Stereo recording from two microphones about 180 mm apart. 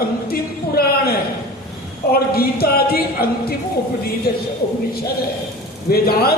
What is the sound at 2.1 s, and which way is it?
Speech, 60° left (ahead or behind).